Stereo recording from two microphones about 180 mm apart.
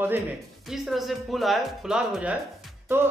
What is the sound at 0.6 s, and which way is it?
A man's voice, centre (ahead or behind).